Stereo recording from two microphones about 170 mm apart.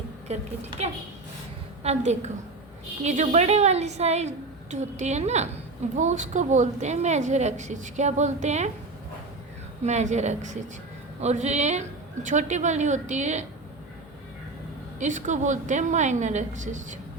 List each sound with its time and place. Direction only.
0.3 s a woman's voice: 40° right (ahead or behind)
9.8 s a woman's voice: 45° right (ahead or behind)
14.9 s a woman's voice: 45° right (ahead or behind)